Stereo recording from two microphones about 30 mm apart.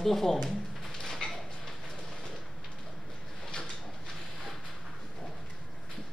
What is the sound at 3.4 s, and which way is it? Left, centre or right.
Sliding door, left.